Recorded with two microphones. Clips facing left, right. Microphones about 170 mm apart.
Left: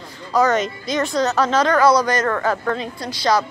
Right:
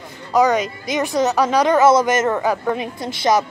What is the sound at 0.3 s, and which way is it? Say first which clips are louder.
A woman's voice: right 1 dB; 15° right (ahead or behind).